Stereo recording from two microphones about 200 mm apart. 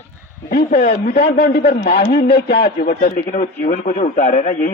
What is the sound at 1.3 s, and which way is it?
A man's voice, 50° left (ahead or behind).